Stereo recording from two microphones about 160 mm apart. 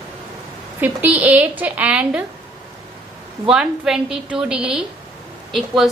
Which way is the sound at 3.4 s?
5° right (ahead or behind).